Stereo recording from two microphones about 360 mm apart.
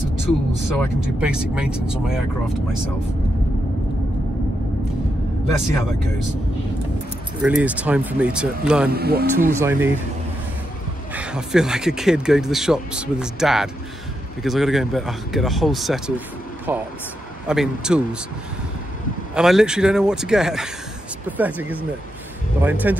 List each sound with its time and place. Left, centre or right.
0.7 s speech: centre
7.4 s speech: centre
8.9 s speech: right
9.6 s speech: centre
11.1 s speech: centre
19.3 s speech: centre